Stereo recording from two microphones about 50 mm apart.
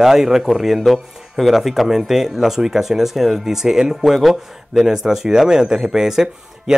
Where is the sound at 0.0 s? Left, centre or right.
Centre.